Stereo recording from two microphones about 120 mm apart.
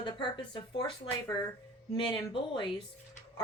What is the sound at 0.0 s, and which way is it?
Speech, 40° left (ahead or behind).